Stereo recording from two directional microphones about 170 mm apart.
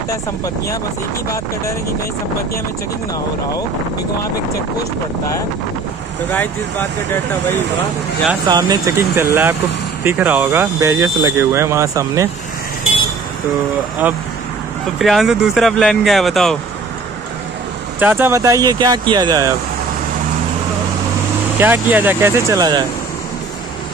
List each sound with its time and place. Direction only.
6.3 s speech: 10° left (ahead or behind)
8.5 s speech: 25° right (ahead or behind)
15.0 s speech: centre (ahead or behind)
17.9 s speech: 10° right (ahead or behind)
21.5 s speech: 10° right (ahead or behind)